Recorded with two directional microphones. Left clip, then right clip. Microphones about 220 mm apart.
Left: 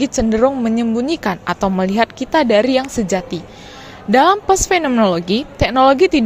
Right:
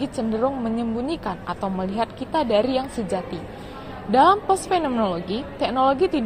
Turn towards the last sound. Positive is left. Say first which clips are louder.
# left 8 dB
turn(degrees=50)  # may be behind; listen again after turning